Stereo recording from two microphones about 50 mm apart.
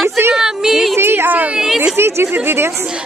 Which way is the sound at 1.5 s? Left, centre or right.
Centre.